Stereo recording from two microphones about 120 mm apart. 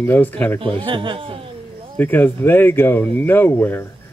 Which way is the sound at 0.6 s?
50° right (ahead or behind).